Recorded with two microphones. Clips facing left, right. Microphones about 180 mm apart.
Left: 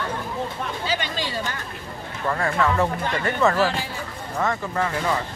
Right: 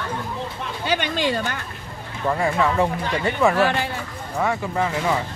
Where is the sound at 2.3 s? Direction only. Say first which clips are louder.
Right 2 dB; 15° right (ahead or behind).